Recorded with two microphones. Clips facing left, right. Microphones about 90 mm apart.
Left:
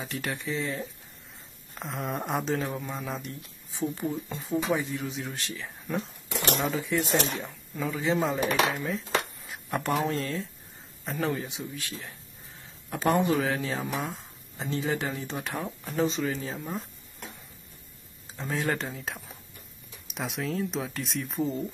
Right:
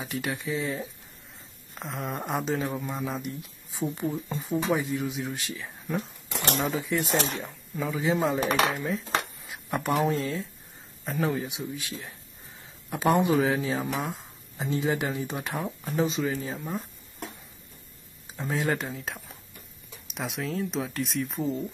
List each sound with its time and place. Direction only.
0.0 s speech: 5° right (ahead or behind)
11.4 s speech: 15° right (ahead or behind)
12.9 s speech: 15° right (ahead or behind)
18.3 s speech: 5° right (ahead or behind)